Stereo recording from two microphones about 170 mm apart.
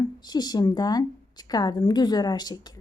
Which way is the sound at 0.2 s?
25° left (ahead or behind).